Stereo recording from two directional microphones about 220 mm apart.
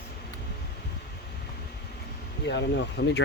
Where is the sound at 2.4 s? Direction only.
50° left (ahead or behind).